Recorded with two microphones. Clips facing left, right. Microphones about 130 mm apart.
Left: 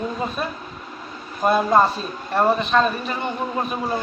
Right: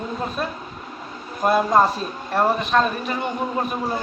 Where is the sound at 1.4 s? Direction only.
Centre (ahead or behind).